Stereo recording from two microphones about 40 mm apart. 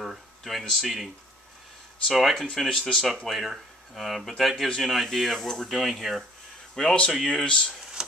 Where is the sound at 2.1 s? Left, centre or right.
Centre.